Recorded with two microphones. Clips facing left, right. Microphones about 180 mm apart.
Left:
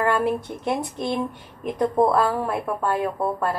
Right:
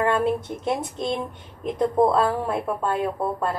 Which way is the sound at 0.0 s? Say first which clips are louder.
Even; 20° right (ahead or behind).